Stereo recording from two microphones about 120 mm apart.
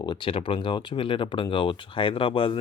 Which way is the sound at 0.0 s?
40° left (ahead or behind).